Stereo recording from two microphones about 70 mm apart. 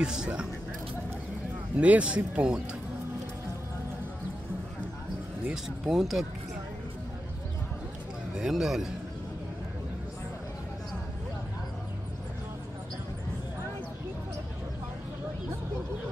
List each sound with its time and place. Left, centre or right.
0.0 s speech: centre
1.8 s speech: centre
5.5 s speech: centre
8.4 s speech: centre